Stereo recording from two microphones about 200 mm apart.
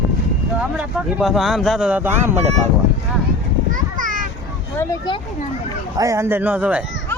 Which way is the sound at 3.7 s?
40° right (ahead or behind).